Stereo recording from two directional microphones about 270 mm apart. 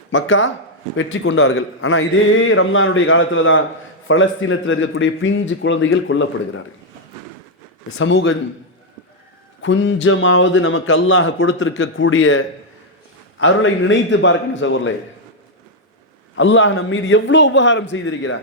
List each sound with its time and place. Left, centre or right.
0.1 s a man's voice: left
7.9 s a man's voice: left
9.6 s a man's voice: left
16.3 s a man's voice: left